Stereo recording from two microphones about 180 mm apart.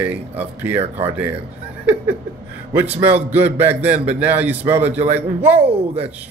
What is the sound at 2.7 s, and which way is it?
A man's voice, 10° right (ahead or behind).